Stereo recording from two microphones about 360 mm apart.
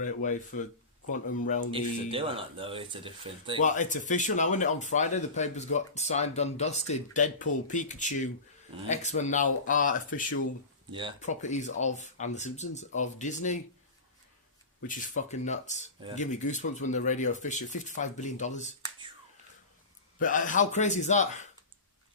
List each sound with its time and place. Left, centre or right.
0.0 s speech: left
2.0 s speech: centre
3.6 s speech: left
14.8 s speech: left
20.1 s speech: left